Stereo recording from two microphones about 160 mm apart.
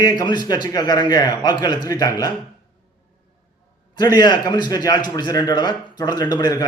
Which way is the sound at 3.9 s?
25° left (ahead or behind).